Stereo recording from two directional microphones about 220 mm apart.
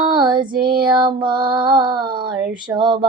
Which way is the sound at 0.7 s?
20° right (ahead or behind).